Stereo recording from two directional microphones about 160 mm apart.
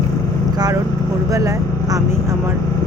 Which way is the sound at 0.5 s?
25° right (ahead or behind).